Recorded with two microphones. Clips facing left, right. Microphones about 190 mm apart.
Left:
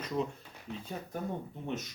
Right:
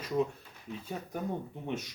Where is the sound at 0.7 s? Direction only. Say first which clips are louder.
Even; 65° left (ahead or behind).